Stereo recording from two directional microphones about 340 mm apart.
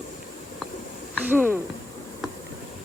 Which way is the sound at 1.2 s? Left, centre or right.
Centre.